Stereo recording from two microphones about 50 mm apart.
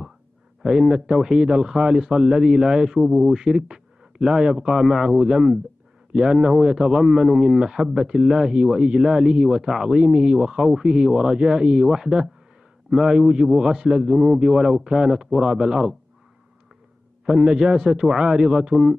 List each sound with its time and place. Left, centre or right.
0.6 s speech: centre
17.3 s speech: centre